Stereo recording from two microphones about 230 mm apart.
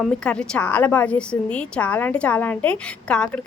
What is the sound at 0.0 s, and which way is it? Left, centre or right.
A woman's voice, centre.